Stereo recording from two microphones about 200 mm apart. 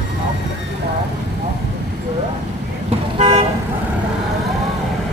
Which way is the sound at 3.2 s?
35° right (ahead or behind).